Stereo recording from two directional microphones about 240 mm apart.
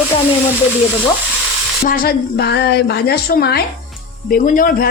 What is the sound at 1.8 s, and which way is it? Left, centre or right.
Speech, left.